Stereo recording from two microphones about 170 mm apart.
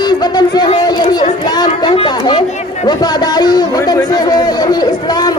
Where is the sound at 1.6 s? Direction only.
30° left (ahead or behind).